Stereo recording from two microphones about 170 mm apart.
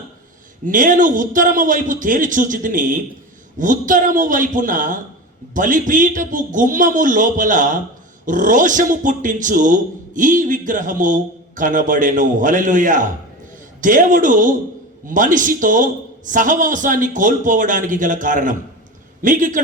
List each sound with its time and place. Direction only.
0.7 s a man's voice: 50° right (ahead or behind)